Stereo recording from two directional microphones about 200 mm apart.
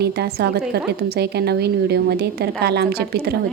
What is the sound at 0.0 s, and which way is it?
A woman's voice, 55° right (ahead or behind).